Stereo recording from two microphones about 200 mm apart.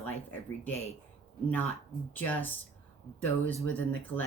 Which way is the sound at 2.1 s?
10° left (ahead or behind).